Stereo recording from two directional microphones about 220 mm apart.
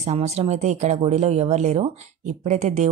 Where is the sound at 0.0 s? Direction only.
30° right (ahead or behind).